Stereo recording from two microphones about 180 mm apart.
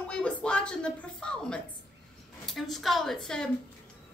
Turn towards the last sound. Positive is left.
turn(degrees=5)  # may be behind; listen again after turning